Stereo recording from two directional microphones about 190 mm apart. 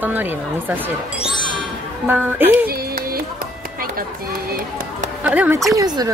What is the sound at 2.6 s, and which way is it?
Music, 50° right (ahead or behind).